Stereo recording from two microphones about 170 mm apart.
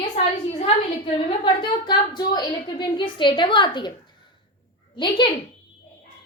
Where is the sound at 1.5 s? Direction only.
25° left (ahead or behind).